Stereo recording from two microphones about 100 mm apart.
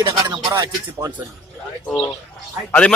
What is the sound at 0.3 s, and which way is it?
Speech, 50° right (ahead or behind).